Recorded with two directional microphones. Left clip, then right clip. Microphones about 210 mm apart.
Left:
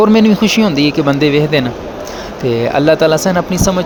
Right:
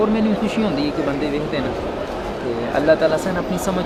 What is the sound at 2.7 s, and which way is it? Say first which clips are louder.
Speech: left 5 dB; 40° left (ahead or behind).